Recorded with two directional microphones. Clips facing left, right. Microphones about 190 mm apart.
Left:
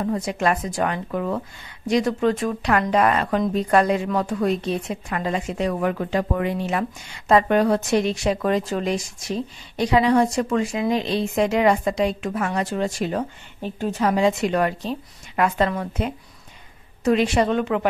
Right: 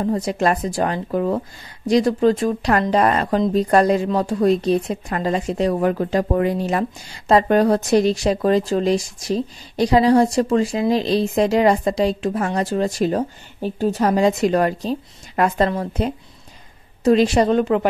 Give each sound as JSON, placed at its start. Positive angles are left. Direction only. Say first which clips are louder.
{"t": 0.0, "sound": "speech", "louder": "right 3 dB", "side_deg": -35}